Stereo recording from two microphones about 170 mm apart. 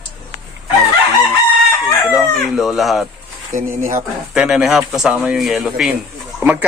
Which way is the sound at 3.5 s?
50° right (ahead or behind).